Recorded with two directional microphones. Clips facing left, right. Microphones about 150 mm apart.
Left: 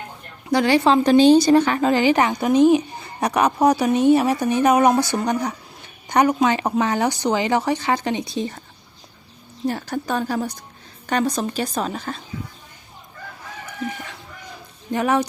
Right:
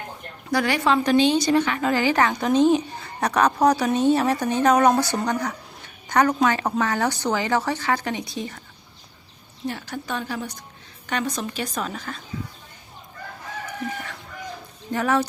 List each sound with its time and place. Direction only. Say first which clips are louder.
0.5 s a woman's voice: left 5 dB; 30° left (ahead or behind)
1.9 s a woman's voice: left 2 dB; 20° left (ahead or behind)
9.6 s a woman's voice: left 6 dB; 40° left (ahead or behind)
14.9 s a woman's voice: left 2 dB; 15° left (ahead or behind)